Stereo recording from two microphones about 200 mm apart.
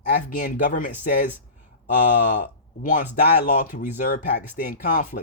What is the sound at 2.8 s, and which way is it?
Speech, 40° left (ahead or behind).